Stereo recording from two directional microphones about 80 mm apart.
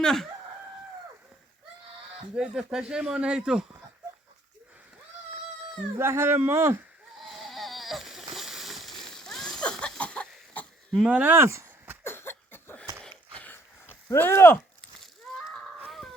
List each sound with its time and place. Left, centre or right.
0.0 s chicken: centre
2.3 s speech: centre
6.0 s speech: right
7.3 s splash: centre
10.0 s chicken: centre
11.0 s speech: centre
12.0 s a sound: left
14.2 s speech: left